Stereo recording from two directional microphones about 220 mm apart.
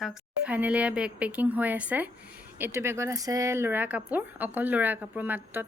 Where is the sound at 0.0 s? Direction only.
5° right (ahead or behind).